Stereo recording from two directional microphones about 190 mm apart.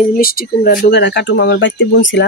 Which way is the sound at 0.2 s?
50° left (ahead or behind).